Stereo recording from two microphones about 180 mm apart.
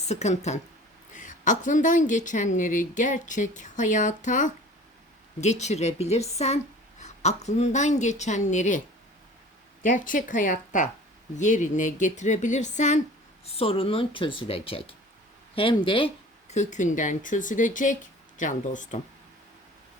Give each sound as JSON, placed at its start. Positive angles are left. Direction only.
{"t": 0.1, "sound": "a woman's voice", "side_deg": 40}
{"t": 9.8, "sound": "a woman's voice", "side_deg": 45}